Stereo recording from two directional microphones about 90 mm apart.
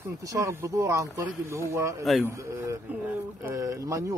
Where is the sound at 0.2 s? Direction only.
40° right (ahead or behind).